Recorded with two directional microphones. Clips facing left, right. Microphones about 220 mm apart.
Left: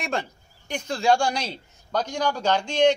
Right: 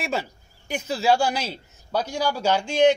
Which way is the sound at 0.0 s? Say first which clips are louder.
Right 1 dB; 5° right (ahead or behind).